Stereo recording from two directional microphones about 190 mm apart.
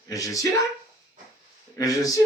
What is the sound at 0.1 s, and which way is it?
Speech, 15° left (ahead or behind).